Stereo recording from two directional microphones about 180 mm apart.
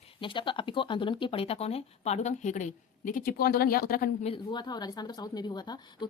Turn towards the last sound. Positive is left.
turn(degrees=20)  # may be behind; listen again after turning